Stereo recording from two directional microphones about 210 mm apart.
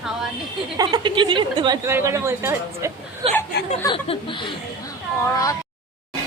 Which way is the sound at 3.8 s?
25° left (ahead or behind).